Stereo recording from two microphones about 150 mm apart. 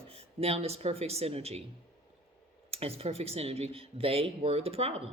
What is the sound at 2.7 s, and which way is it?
Speech, 40° right (ahead or behind).